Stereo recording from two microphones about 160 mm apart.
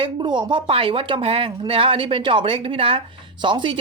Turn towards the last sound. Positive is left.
turn(degrees=-30)  # may be behind; listen again after turning